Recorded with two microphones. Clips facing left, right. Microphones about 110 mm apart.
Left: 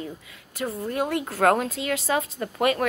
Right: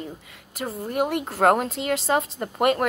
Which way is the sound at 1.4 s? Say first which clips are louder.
Right 2 dB; 35° right (ahead or behind).